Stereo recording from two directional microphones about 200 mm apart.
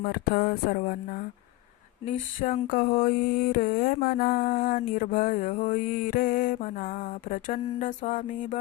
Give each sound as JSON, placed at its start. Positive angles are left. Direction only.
{"t": 0.0, "sound": "mantra", "side_deg": 50}